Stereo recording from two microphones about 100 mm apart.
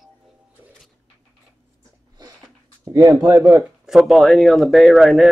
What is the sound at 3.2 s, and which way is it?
Speech, 35° right (ahead or behind).